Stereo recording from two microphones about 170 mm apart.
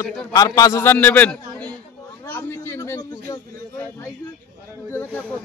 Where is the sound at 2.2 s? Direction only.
15° left (ahead or behind).